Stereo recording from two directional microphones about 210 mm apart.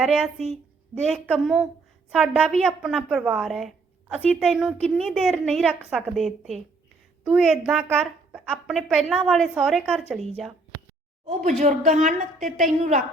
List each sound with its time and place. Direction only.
0.0 s a woman's voice: centre (ahead or behind)
11.6 s a woman's voice: 40° right (ahead or behind)